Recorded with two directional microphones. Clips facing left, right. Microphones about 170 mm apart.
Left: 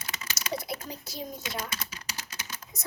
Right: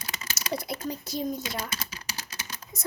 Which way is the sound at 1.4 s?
30° right (ahead or behind).